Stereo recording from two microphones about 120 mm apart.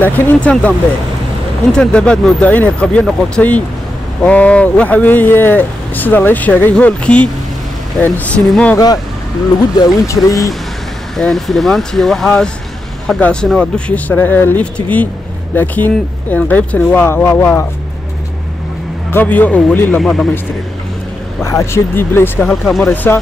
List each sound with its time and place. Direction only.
0.0 s speech: 10° left (ahead or behind)
8.7 s speech: 30° left (ahead or behind)
11.1 s speech: centre (ahead or behind); by 17.6 s 20° left (ahead or behind)
19.1 s speech: 15° left (ahead or behind)
20.0 s speech: centre (ahead or behind)
21.4 s speech: 25° left (ahead or behind)
22.5 s speech: centre (ahead or behind)